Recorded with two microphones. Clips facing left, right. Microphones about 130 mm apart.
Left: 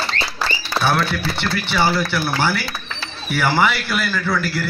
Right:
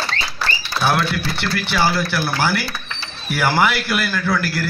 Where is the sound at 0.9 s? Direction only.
5° right (ahead or behind).